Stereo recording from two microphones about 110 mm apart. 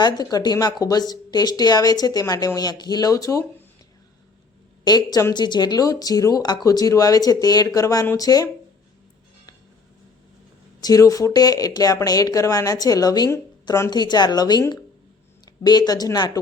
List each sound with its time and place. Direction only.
0.0 s speech: 35° left (ahead or behind)
4.9 s speech: 35° left (ahead or behind)
10.8 s speech: 35° left (ahead or behind)